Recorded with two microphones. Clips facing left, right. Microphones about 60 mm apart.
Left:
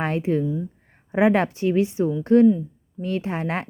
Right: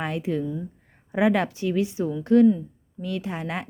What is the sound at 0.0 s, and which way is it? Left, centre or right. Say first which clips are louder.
A woman's voice: left 4 dB; left.